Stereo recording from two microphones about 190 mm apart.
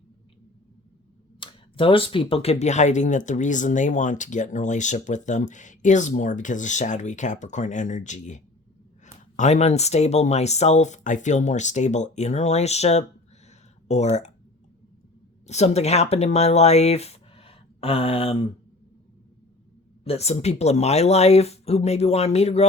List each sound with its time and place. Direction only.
1.4 s speech: 25° left (ahead or behind)
15.4 s speech: 35° left (ahead or behind)
20.1 s speech: 35° left (ahead or behind)